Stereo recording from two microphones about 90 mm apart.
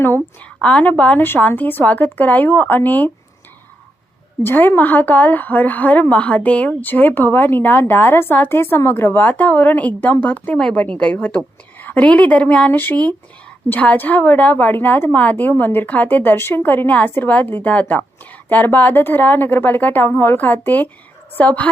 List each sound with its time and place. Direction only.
0.6 s a woman's voice: 15° left (ahead or behind)
4.4 s a woman's voice: 25° left (ahead or behind)